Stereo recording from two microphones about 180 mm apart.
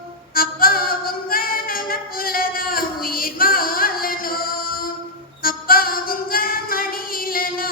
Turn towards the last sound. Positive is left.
turn(degrees=55)  # may be behind; listen again after turning